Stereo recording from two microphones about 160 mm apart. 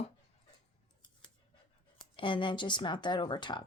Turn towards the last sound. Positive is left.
turn(degrees=30)  # may be behind; listen again after turning